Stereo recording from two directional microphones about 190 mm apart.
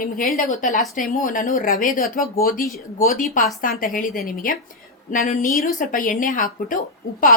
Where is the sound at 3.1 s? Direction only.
45° left (ahead or behind).